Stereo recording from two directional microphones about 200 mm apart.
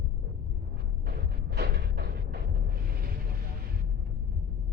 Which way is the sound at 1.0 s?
55° right (ahead or behind).